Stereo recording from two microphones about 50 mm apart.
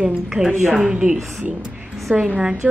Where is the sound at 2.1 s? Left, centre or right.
Right.